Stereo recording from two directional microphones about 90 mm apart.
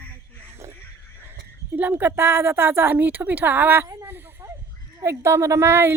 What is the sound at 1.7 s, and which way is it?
A woman's voice, 20° right (ahead or behind).